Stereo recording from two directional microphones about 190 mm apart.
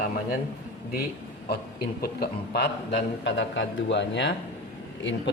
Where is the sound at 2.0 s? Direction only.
55° left (ahead or behind).